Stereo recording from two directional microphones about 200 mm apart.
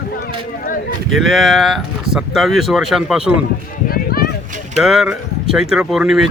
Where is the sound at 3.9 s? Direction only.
50° left (ahead or behind).